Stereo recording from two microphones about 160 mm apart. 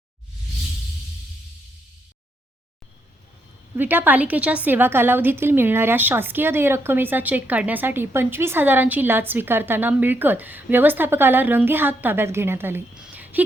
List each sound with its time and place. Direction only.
3.8 s a woman's voice: 10° right (ahead or behind)